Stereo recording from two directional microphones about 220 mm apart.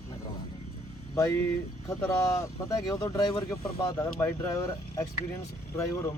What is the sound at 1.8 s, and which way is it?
Speech, 15° left (ahead or behind).